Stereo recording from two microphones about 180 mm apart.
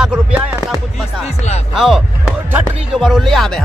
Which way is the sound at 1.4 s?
35° left (ahead or behind).